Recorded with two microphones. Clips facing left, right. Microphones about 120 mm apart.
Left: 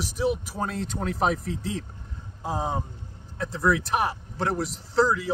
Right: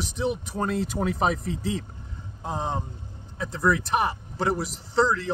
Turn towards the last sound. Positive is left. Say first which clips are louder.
# even
turn(degrees=5)  # may be behind; listen again after turning